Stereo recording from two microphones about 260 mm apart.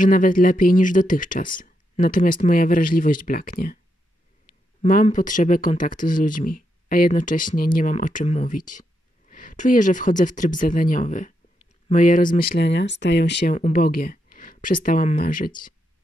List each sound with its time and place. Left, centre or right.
0.0 s speech: left
4.8 s speech: left
13.6 s speech: left